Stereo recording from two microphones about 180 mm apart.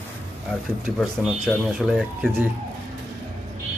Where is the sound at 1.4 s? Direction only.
Centre (ahead or behind).